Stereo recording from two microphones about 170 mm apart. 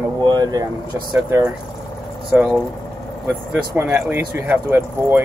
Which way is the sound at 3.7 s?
10° right (ahead or behind).